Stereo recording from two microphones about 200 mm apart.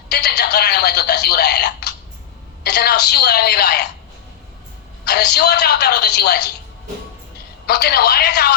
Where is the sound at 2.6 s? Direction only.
55° left (ahead or behind).